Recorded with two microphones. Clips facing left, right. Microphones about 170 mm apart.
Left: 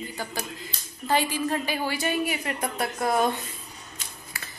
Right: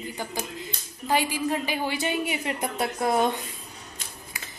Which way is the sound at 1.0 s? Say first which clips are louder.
Even; 10° right (ahead or behind).